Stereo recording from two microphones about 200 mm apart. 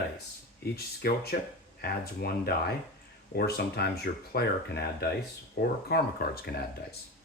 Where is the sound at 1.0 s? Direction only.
50° left (ahead or behind).